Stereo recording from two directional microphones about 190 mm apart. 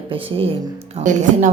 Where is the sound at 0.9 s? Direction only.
40° right (ahead or behind).